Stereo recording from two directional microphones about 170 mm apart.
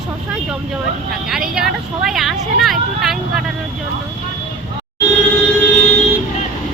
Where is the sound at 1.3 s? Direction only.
Centre (ahead or behind).